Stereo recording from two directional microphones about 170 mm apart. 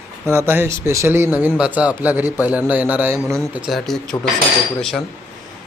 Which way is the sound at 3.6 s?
Centre (ahead or behind).